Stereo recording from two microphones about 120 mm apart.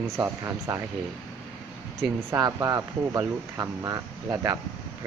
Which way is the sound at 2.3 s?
30° right (ahead or behind).